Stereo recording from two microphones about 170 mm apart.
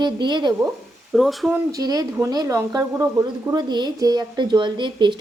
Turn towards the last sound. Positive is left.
turn(degrees=-30)  # may be behind; listen again after turning